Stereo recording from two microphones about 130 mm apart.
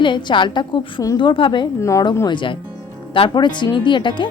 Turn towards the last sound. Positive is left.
turn(degrees=35)  # may be behind; listen again after turning